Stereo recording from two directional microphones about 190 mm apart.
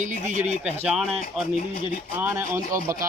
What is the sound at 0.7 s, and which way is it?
Speech, 5° right (ahead or behind).